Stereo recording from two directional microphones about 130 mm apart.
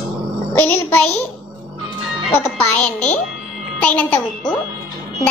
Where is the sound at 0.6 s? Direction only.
15° left (ahead or behind).